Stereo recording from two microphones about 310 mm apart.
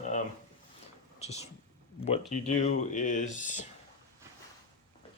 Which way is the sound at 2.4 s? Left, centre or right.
Left.